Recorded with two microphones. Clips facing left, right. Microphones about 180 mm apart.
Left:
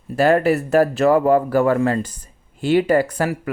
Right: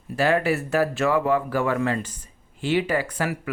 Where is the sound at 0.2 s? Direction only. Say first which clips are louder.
Left 6 dB; 40° left (ahead or behind).